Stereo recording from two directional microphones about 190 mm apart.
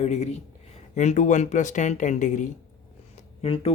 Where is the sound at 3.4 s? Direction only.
30° left (ahead or behind).